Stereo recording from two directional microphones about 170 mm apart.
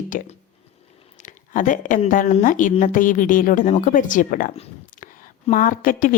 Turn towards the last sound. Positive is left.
turn(degrees=55)  # may be behind; listen again after turning